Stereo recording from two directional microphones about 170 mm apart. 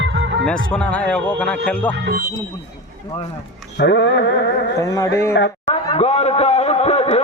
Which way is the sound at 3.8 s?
90° left.